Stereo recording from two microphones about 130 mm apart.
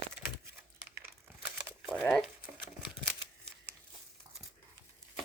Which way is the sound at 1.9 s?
5° left (ahead or behind).